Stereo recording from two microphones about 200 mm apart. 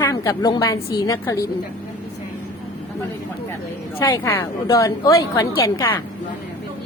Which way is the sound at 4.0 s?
15° left (ahead or behind).